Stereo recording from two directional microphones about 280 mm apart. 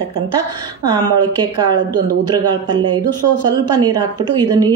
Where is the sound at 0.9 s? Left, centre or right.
Centre.